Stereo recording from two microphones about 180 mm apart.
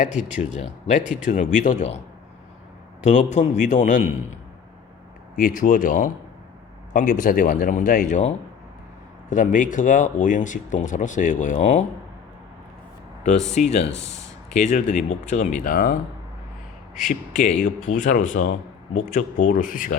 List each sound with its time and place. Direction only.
0.0 s speech: 40° left (ahead or behind)
3.0 s speech: 40° left (ahead or behind)
5.4 s speech: 50° left (ahead or behind)
9.3 s speech: 45° left (ahead or behind)
13.5 s speech: 40° left (ahead or behind)
17.1 s speech: 45° left (ahead or behind)